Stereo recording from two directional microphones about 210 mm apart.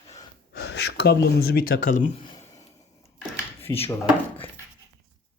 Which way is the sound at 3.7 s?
10° left (ahead or behind).